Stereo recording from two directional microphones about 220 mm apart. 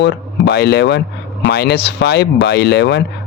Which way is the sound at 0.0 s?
50° left (ahead or behind).